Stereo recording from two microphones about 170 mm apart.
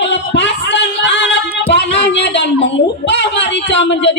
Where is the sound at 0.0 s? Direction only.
90° left.